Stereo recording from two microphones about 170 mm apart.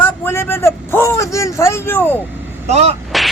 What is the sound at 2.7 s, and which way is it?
Speech, 40° right (ahead or behind).